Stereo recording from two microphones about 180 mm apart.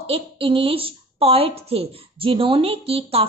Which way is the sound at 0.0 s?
30° right (ahead or behind).